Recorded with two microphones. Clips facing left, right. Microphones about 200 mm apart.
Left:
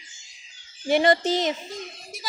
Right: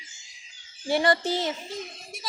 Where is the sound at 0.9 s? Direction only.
20° left (ahead or behind).